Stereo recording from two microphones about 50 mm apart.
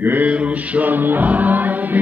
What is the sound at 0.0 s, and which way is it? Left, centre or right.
Mantra, right.